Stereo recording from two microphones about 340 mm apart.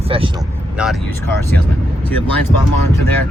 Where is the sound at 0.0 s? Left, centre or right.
Centre.